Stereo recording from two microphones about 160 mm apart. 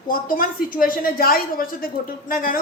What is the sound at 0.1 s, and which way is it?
A woman's voice, 60° left (ahead or behind).